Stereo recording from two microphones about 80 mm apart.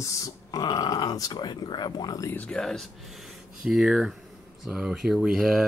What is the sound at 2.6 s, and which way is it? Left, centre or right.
Speech, centre.